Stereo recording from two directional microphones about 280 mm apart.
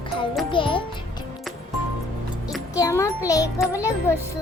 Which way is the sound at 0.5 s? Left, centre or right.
Centre.